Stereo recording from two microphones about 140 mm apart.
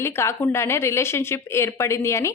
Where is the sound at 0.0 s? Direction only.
20° left (ahead or behind).